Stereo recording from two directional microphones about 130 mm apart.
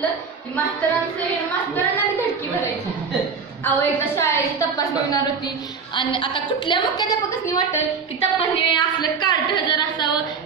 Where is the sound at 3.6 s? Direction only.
15° left (ahead or behind).